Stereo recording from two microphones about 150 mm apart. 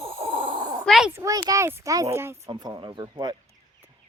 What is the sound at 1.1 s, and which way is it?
Speech, 20° right (ahead or behind).